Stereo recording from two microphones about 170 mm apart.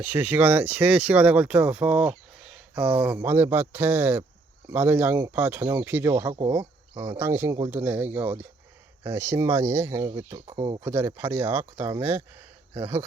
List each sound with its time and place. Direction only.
0.0 s speech: 10° right (ahead or behind)